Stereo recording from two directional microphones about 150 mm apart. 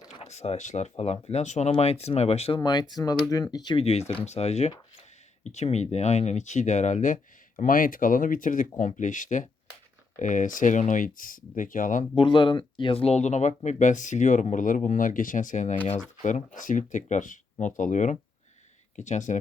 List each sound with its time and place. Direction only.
0.2 s speech: 45° left (ahead or behind)
2.6 s speech: 25° left (ahead or behind)
4.3 s speech: 45° left (ahead or behind); by 12.0 s 60° left (ahead or behind)
12.1 s speech: 35° left (ahead or behind); by 15.7 s 55° left (ahead or behind)
15.8 s speech: 10° left (ahead or behind)
16.6 s speech: 60° left (ahead or behind)